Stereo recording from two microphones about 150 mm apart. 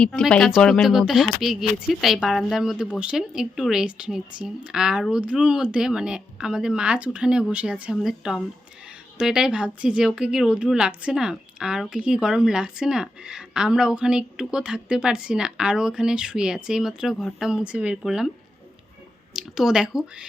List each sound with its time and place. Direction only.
0.0 s speech: 5° left (ahead or behind)
19.3 s speech: 5° right (ahead or behind)